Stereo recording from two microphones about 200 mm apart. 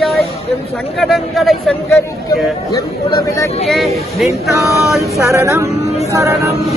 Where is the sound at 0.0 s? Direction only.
Centre (ahead or behind).